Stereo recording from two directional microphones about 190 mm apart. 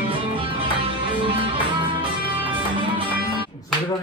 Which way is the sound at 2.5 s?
25° right (ahead or behind).